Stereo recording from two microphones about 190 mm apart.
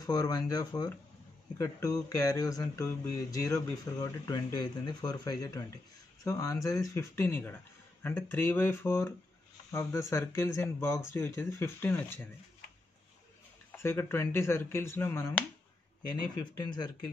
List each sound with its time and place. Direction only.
0.0 s speech: 20° left (ahead or behind)
13.7 s speech: 10° left (ahead or behind)